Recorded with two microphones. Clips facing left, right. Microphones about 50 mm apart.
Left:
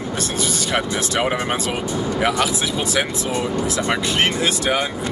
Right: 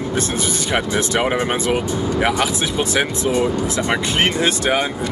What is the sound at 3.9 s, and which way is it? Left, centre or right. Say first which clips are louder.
Speech: right 1 dB; centre.